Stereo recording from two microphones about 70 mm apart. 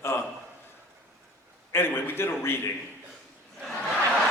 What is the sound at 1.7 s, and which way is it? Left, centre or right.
Speech, left.